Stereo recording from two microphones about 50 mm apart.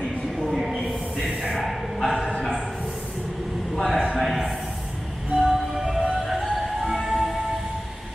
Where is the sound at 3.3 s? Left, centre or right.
Centre.